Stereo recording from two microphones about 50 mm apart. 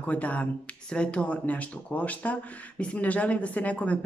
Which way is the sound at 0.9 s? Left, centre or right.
Centre.